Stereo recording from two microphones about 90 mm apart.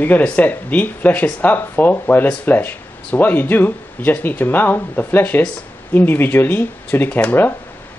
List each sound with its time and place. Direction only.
0.0 s speech: 15° left (ahead or behind)